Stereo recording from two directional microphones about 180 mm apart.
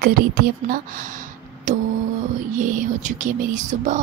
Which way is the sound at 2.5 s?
45° right (ahead or behind).